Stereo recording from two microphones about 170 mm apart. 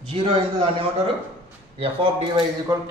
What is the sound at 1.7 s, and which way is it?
Speech, 35° right (ahead or behind).